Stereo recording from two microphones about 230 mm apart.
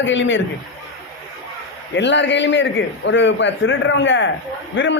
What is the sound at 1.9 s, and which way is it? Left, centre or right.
A man's voice, left.